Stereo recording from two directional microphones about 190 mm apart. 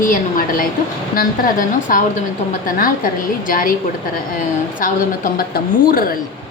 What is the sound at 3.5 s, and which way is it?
Speech, 45° left (ahead or behind).